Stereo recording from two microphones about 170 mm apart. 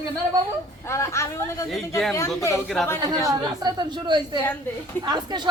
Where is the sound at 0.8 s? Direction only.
15° left (ahead or behind).